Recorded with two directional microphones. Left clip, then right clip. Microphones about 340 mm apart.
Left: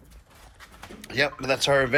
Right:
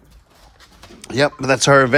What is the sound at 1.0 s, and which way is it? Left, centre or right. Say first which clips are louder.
Speech: right 7 dB; centre.